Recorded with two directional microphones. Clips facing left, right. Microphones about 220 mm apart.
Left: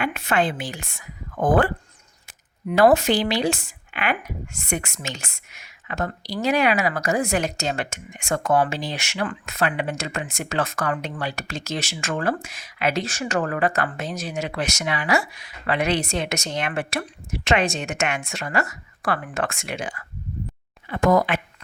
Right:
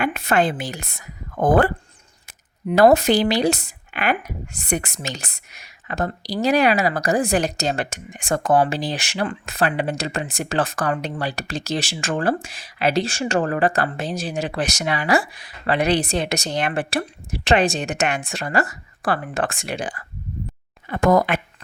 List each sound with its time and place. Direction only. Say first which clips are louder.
0.0 s speech: right 3 dB; 40° right (ahead or behind)